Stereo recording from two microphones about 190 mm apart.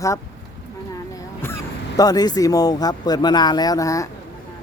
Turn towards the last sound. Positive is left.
turn(degrees=15)  # may be behind; listen again after turning